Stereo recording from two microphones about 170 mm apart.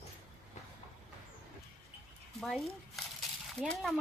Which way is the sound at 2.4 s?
Centre (ahead or behind).